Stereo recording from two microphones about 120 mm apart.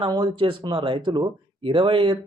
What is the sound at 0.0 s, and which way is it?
Speech, 40° right (ahead or behind).